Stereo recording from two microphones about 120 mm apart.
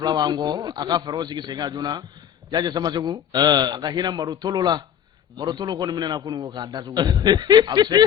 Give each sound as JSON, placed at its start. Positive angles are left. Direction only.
{"t": 0.0, "sound": "a man's voice", "side_deg": -35}